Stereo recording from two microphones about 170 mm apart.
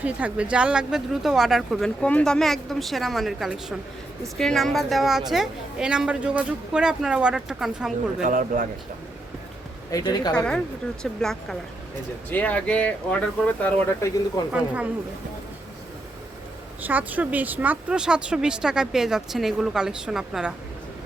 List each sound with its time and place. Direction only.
0.0 s a woman's voice: 10° right (ahead or behind)
8.2 s speech: 50° right (ahead or behind)
9.9 s speech: 25° left (ahead or behind)
10.3 s a woman's voice: 5° left (ahead or behind)
16.8 s a woman's voice: 10° right (ahead or behind)